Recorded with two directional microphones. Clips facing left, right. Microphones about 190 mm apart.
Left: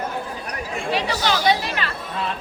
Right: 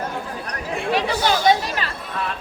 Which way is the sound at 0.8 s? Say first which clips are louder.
Right 3 dB; 50° right (ahead or behind).